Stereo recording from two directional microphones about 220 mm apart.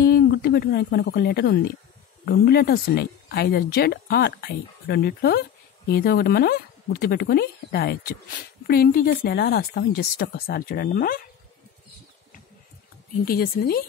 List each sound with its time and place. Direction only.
0.0 s speech: 45° left (ahead or behind)
13.2 s speech: 45° left (ahead or behind)